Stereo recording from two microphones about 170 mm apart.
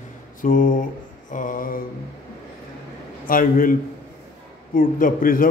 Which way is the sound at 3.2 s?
55° left (ahead or behind).